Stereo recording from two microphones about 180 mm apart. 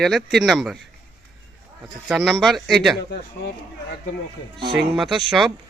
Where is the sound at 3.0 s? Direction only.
65° left (ahead or behind).